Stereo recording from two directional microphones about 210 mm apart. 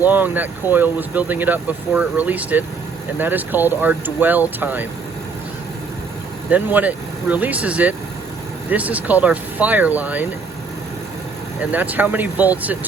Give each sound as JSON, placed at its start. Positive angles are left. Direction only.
{"t": 0.0, "sound": "speech", "side_deg": -10}
{"t": 6.5, "sound": "speech", "side_deg": -5}
{"t": 11.7, "sound": "speech", "side_deg": -10}